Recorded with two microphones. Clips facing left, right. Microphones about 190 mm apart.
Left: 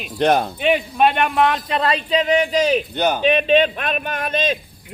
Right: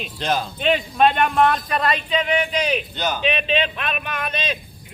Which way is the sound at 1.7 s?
30° left (ahead or behind).